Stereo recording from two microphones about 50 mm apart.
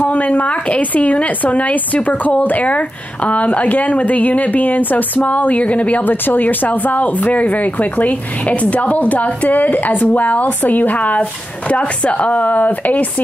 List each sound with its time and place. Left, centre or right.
0.0 s speech: left